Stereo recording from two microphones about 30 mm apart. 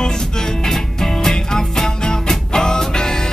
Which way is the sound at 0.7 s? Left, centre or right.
Centre.